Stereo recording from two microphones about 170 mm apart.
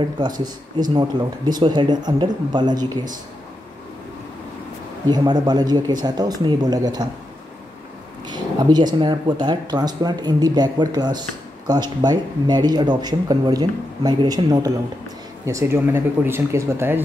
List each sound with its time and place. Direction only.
0.3 s speech: 50° right (ahead or behind)
0.9 s speech: 25° right (ahead or behind)
5.1 s speech: 25° right (ahead or behind)
8.3 s speech: 25° right (ahead or behind)